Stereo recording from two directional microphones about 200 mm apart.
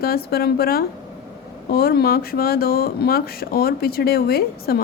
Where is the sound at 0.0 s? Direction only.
50° left (ahead or behind).